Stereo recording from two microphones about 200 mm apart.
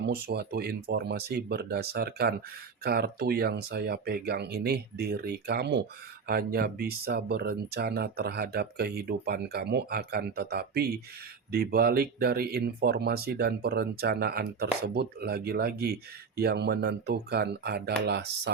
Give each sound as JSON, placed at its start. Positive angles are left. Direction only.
{"t": 0.0, "sound": "speech", "side_deg": -55}